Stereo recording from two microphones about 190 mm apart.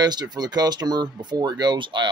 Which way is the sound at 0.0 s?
20° right (ahead or behind).